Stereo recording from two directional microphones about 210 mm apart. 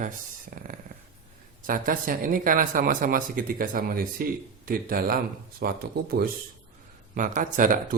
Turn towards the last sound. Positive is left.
turn(degrees=-40)  # may be behind; listen again after turning